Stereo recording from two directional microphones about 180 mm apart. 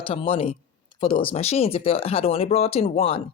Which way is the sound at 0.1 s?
30° left (ahead or behind).